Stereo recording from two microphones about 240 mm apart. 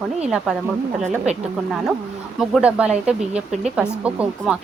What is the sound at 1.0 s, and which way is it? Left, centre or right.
Speech, right.